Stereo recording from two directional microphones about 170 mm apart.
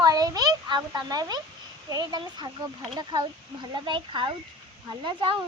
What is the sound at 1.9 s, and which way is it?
A child's voice, 25° right (ahead or behind).